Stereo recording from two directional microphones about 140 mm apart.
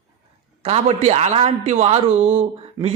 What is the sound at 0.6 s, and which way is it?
A man's voice, 50° right (ahead or behind).